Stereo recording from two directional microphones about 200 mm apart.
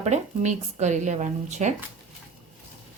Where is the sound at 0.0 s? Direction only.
35° right (ahead or behind).